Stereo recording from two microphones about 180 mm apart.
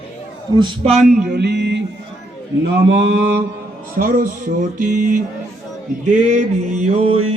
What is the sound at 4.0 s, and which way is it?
Speech, 50° right (ahead or behind).